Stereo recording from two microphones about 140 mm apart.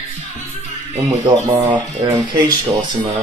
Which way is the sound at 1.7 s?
30° right (ahead or behind).